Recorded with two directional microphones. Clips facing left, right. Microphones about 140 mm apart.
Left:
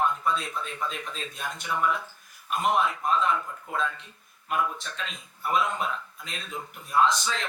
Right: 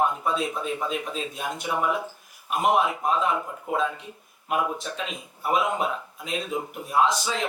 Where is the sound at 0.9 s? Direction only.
10° right (ahead or behind).